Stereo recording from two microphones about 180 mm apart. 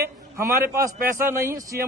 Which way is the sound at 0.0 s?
15° right (ahead or behind).